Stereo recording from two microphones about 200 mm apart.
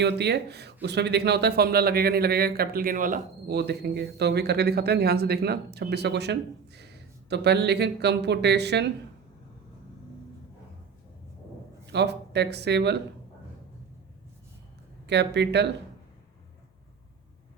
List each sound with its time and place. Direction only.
0.0 s speech: 55° right (ahead or behind)
11.9 s speech: 55° right (ahead or behind)
15.0 s speech: 60° right (ahead or behind)